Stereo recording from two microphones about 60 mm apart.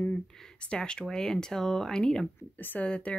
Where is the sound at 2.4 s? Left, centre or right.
Left.